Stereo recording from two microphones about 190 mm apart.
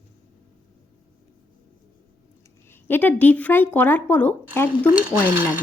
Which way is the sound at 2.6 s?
10° left (ahead or behind).